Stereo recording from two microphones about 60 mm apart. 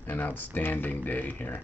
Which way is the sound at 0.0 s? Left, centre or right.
Left.